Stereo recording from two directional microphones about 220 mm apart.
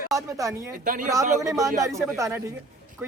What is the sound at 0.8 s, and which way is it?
Speech, 35° right (ahead or behind).